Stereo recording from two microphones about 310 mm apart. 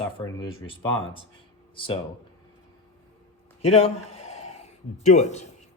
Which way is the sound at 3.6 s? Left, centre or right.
Centre.